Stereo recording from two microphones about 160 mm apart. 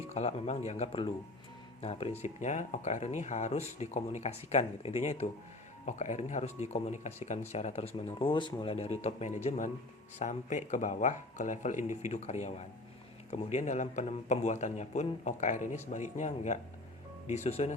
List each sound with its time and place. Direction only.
0.1 s speech: 45° left (ahead or behind)